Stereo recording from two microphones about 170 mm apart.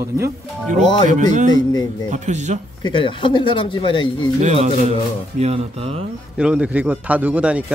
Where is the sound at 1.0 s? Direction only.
45° right (ahead or behind).